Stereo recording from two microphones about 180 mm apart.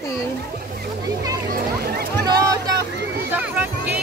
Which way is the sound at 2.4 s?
20° right (ahead or behind).